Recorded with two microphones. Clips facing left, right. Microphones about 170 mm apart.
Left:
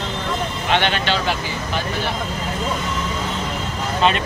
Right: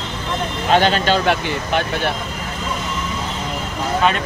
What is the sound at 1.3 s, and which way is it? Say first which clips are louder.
Speech: right 5 dB; 60° right (ahead or behind).